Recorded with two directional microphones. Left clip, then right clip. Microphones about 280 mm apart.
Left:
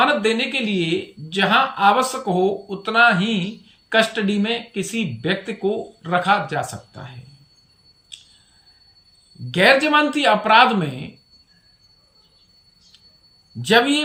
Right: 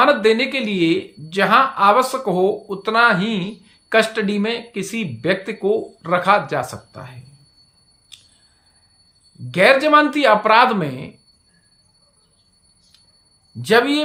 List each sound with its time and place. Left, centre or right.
0.0 s speech: centre
8.1 s a sound: centre
9.5 s speech: centre
13.6 s a man's voice: centre